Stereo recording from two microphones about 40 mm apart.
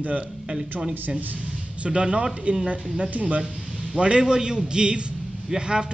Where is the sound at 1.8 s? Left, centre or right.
Right.